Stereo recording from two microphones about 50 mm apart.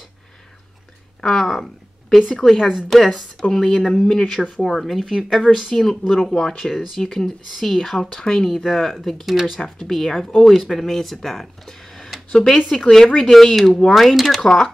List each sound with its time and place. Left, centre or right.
1.2 s a woman's voice: centre
9.6 s speech: centre
12.3 s speech: centre
14.4 s speech: centre